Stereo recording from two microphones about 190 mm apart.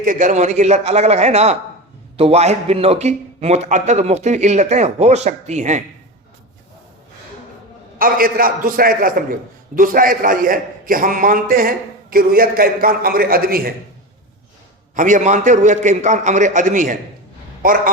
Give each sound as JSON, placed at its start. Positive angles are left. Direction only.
{"t": 0.0, "sound": "a man's voice", "side_deg": -45}
{"t": 7.9, "sound": "a man's voice", "side_deg": -50}
{"t": 14.9, "sound": "a man's voice", "side_deg": -40}